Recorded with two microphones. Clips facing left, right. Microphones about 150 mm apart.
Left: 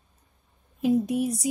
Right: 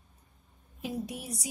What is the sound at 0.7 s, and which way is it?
Speech, 50° left (ahead or behind).